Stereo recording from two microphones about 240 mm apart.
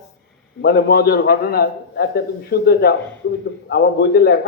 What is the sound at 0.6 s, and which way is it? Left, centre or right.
A man's voice, left.